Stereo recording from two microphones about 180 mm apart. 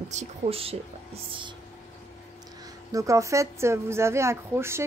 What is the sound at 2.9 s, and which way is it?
Speech, 15° right (ahead or behind).